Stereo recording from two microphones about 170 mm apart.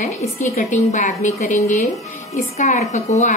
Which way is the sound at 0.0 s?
45° left (ahead or behind).